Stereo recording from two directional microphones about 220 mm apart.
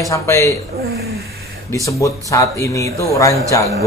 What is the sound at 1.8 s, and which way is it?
Speech, 15° left (ahead or behind).